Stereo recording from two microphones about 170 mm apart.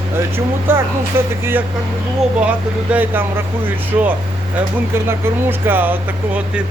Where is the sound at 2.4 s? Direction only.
10° right (ahead or behind).